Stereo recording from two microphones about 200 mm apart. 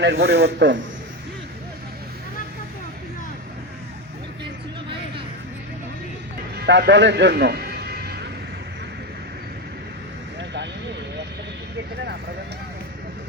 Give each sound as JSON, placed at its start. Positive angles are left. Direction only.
{"t": 0.0, "sound": "a man's voice", "side_deg": -55}
{"t": 6.6, "sound": "music", "side_deg": -60}